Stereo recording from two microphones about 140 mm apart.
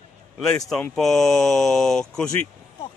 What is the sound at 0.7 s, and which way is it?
Speech, centre (ahead or behind).